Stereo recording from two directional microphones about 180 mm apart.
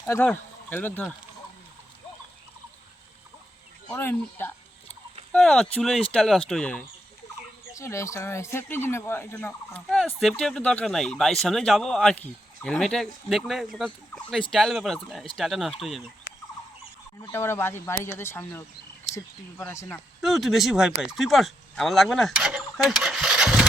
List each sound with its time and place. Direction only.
0.0 s speech: 10° left (ahead or behind)
3.8 s speech: 10° left (ahead or behind)
7.7 s speech: 15° left (ahead or behind); by 16.0 s centre (ahead or behind)
17.3 s speech: 15° left (ahead or behind)
20.2 s speech: centre (ahead or behind)